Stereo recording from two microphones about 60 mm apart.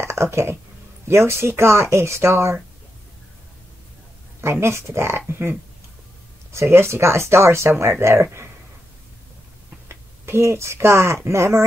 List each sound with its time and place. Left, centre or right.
0.0 s speech: right
4.4 s speech: right
6.5 s speech: right
9.8 s speech: right